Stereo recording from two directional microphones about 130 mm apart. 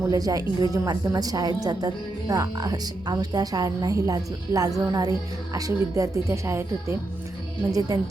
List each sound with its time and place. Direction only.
0.1 s a woman's voice: 25° right (ahead or behind)